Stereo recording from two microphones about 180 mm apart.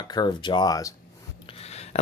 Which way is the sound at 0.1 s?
25° left (ahead or behind).